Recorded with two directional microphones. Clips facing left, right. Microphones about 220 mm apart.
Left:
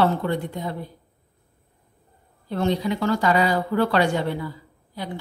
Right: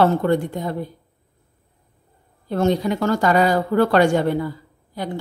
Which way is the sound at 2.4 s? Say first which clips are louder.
Right 4 dB; 45° right (ahead or behind).